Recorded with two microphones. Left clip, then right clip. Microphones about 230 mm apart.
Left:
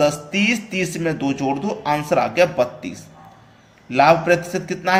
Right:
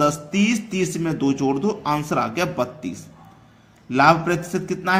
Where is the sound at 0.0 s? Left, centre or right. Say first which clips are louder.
Left 2 dB; right.